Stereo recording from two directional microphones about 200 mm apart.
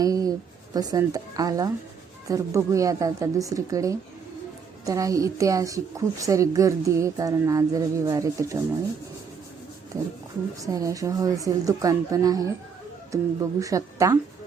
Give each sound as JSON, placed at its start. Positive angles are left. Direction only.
{"t": 0.0, "sound": "a woman's voice", "side_deg": -15}
{"t": 10.6, "sound": "a woman's voice", "side_deg": -15}